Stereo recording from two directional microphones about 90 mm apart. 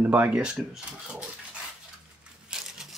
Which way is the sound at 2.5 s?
5° right (ahead or behind).